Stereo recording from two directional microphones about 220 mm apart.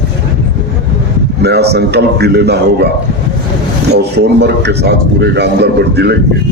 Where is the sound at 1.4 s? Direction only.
50° right (ahead or behind).